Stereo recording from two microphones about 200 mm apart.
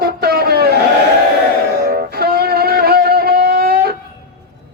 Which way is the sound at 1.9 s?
50° right (ahead or behind).